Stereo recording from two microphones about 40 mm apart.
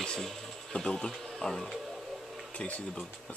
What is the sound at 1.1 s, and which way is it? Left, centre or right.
Speech, centre.